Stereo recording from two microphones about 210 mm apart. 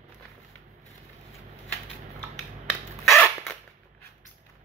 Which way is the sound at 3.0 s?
Centre (ahead or behind).